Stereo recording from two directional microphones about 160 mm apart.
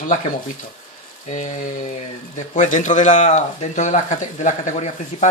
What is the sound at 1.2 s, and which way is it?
A man's voice, 50° left (ahead or behind).